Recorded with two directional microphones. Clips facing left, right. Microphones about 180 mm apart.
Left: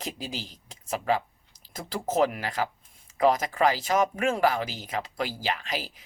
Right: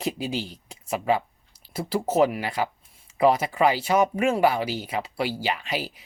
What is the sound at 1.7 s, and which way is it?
Speech, 10° right (ahead or behind).